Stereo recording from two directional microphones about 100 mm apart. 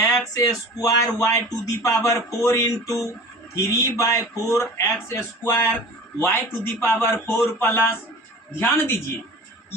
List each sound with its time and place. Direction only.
0.1 s speech: 35° left (ahead or behind)